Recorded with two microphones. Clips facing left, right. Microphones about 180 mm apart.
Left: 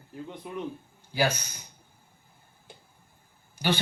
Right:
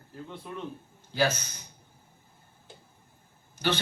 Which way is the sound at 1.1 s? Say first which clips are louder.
Even; 10° left (ahead or behind).